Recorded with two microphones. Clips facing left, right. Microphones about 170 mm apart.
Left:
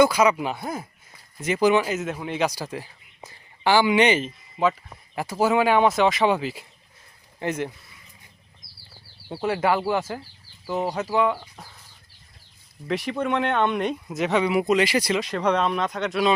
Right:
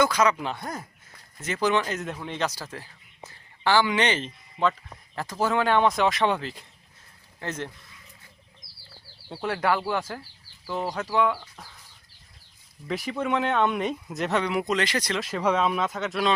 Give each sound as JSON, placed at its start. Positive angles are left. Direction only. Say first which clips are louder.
{"t": 0.0, "sound": "speech", "louder": "left 4 dB", "side_deg": 10}
{"t": 9.3, "sound": "speech", "louder": "left 3 dB", "side_deg": 5}
{"t": 11.3, "sound": "speech", "louder": "left 2 dB", "side_deg": 20}
{"t": 12.9, "sound": "speech", "louder": "left 2 dB", "side_deg": 0}
{"t": 15.2, "sound": "speech", "louder": "left 2 dB", "side_deg": -5}